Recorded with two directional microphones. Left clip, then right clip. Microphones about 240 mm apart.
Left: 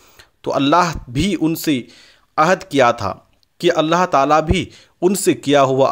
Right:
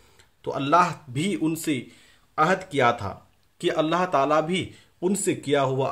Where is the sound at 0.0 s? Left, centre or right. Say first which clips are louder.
Left 7 dB; left.